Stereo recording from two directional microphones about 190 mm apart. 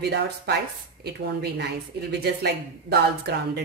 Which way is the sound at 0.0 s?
60° right (ahead or behind).